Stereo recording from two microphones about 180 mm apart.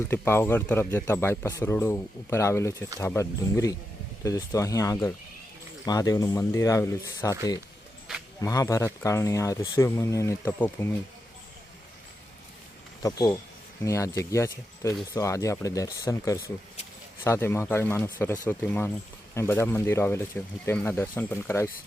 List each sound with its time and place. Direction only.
0.1 s speech: 10° left (ahead or behind)
8.4 s speech: 15° left (ahead or behind)
13.0 s speech: 20° left (ahead or behind)